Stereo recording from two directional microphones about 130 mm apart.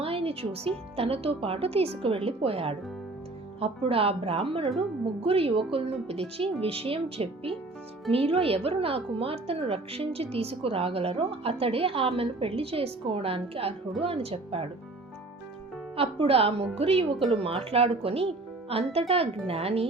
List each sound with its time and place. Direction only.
0.0 s a woman's voice: 45° right (ahead or behind)
16.0 s a woman's voice: 45° right (ahead or behind)